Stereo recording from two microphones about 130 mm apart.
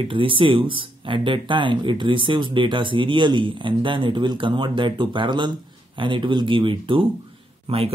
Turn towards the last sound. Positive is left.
turn(degrees=-50)  # may be behind; listen again after turning